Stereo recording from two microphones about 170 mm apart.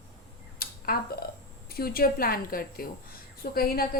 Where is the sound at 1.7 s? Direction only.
60° left (ahead or behind).